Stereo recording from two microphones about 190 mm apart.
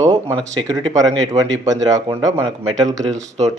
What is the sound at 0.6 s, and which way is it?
Speech, 20° right (ahead or behind).